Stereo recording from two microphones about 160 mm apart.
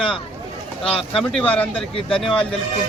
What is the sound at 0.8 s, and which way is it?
Speech, 35° left (ahead or behind).